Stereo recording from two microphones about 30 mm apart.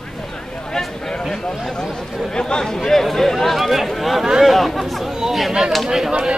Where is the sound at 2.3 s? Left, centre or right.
Left.